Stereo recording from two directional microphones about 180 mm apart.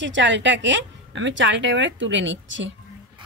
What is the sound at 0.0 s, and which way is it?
A woman's voice, 90° right.